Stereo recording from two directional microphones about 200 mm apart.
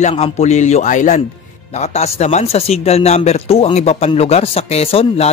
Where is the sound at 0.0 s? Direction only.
35° left (ahead or behind).